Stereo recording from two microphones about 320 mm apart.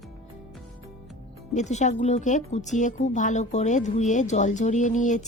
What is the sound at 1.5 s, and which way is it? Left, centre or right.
A woman's voice, left.